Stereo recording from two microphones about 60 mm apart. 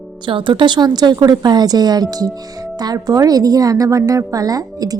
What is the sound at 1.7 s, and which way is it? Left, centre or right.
A woman's voice, right.